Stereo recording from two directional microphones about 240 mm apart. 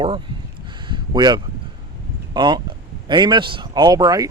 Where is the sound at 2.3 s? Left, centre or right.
Centre.